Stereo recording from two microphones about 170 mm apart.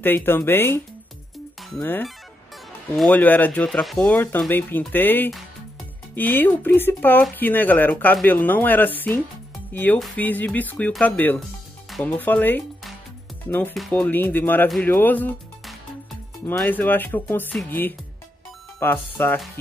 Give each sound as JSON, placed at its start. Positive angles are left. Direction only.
{"t": 0.0, "sound": "speech", "side_deg": 10}
{"t": 16.4, "sound": "speech", "side_deg": 10}